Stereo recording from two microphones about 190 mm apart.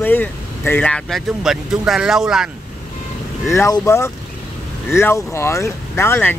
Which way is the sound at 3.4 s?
15° left (ahead or behind).